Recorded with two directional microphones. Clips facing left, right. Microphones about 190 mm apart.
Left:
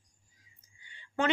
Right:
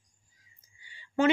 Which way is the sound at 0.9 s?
5° right (ahead or behind).